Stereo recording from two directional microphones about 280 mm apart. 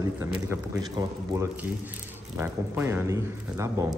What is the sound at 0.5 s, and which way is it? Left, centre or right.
A man's voice, centre.